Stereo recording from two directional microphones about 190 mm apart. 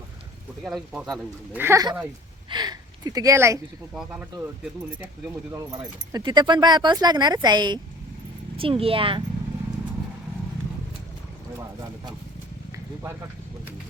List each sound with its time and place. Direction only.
0.6 s speech: centre (ahead or behind)
1.5 s speech: 15° right (ahead or behind)
6.1 s speech: 20° right (ahead or behind)
11.5 s vehicle: 20° right (ahead or behind)
12.7 s a sound: 15° right (ahead or behind)